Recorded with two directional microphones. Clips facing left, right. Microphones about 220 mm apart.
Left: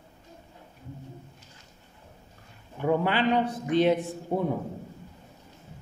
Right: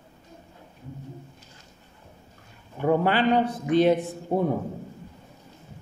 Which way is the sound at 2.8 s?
40° right (ahead or behind).